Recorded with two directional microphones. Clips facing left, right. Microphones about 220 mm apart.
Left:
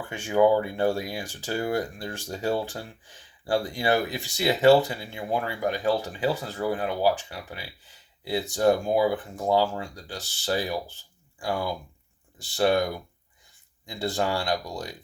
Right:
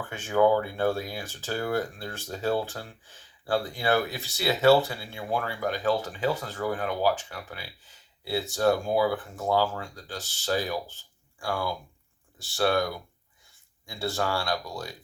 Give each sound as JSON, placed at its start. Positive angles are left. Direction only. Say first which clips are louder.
{"t": 0.0, "sound": "speech", "louder": "left 2 dB", "side_deg": 15}